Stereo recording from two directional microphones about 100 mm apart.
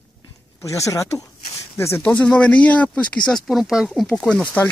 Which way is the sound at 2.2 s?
10° left (ahead or behind).